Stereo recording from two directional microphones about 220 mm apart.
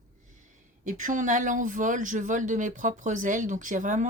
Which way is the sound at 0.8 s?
35° right (ahead or behind).